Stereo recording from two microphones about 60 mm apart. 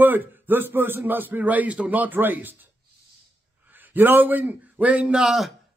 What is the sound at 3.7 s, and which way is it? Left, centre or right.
A man's voice, right.